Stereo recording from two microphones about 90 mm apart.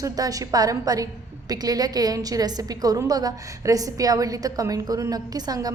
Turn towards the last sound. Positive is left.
turn(degrees=-45)  # may be behind; listen again after turning